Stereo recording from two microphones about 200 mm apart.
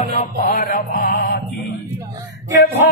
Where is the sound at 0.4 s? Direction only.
45° left (ahead or behind).